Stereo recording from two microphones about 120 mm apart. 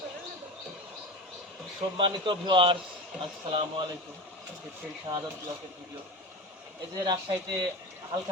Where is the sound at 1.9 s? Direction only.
40° right (ahead or behind).